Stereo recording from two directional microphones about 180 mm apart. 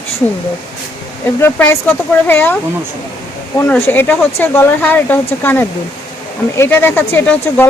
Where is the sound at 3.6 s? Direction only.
10° left (ahead or behind).